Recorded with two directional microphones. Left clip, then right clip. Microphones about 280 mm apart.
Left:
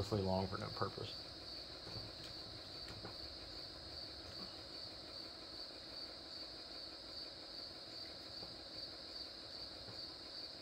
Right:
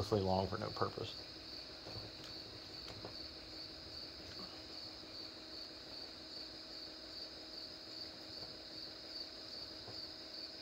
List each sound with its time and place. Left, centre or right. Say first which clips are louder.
0.1 s speech: right 5 dB; right